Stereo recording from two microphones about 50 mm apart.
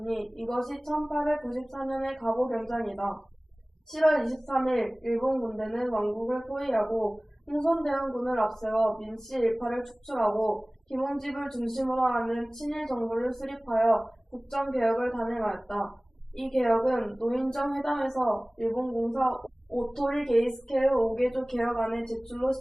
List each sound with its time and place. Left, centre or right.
0.0 s a woman's voice: centre